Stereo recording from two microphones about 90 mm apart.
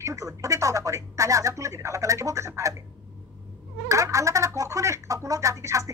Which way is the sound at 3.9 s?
35° right (ahead or behind).